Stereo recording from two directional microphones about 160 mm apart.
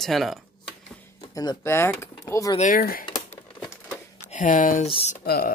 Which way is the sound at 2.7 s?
60° left (ahead or behind).